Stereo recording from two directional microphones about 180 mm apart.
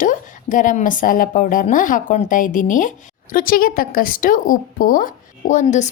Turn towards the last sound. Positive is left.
turn(degrees=40)  # may be behind; listen again after turning